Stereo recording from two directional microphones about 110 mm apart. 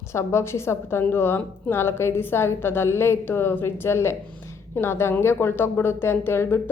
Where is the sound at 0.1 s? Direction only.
25° left (ahead or behind).